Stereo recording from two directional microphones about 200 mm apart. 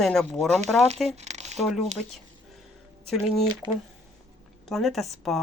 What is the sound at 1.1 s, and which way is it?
Crumpling, 35° right (ahead or behind).